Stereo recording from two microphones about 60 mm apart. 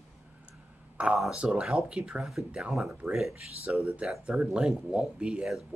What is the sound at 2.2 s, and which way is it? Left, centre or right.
Speech, centre.